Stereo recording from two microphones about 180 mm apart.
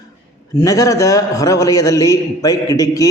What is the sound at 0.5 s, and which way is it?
A man's voice, 20° left (ahead or behind).